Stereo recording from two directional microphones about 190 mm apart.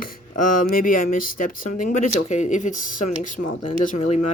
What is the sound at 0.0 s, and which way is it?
Speech, 45° left (ahead or behind).